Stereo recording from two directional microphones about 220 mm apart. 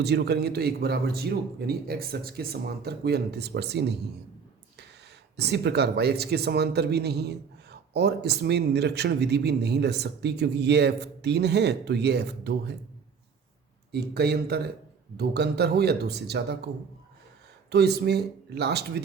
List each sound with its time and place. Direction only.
0.0 s speech: 50° right (ahead or behind)
5.4 s speech: 50° right (ahead or behind)
13.9 s speech: 45° right (ahead or behind)
17.7 s speech: 50° right (ahead or behind)